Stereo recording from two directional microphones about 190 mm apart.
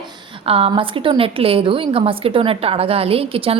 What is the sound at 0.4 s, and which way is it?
A woman's voice, 30° right (ahead or behind).